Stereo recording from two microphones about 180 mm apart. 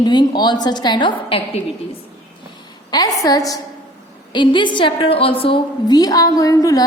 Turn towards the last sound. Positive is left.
turn(degrees=20)  # may be behind; listen again after turning